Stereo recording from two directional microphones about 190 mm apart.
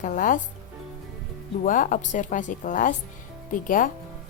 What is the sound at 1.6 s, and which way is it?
Speech, 45° left (ahead or behind).